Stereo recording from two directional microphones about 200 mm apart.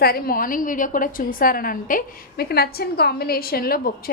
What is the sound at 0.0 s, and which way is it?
A woman's voice, 50° left (ahead or behind).